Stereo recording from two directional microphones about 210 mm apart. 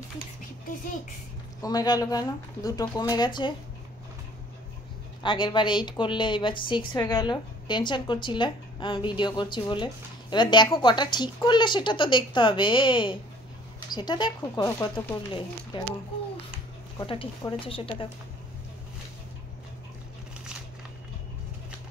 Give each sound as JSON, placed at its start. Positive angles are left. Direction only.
{"t": 1.6, "sound": "a woman's voice", "side_deg": 15}
{"t": 5.2, "sound": "a woman's voice", "side_deg": 20}
{"t": 17.0, "sound": "a woman's voice", "side_deg": 25}